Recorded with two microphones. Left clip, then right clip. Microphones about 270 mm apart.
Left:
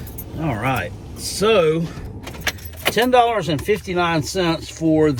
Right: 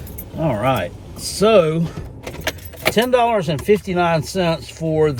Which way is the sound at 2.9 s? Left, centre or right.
Centre.